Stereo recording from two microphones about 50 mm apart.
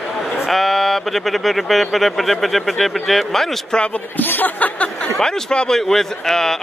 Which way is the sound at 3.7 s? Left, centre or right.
Left.